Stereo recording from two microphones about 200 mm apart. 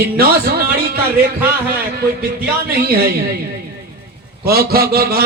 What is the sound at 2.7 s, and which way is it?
Speech, 50° right (ahead or behind).